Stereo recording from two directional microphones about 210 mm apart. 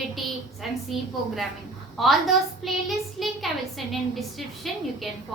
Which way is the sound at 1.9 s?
Centre (ahead or behind).